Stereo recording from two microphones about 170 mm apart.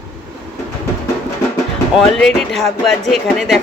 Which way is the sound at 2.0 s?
5° left (ahead or behind).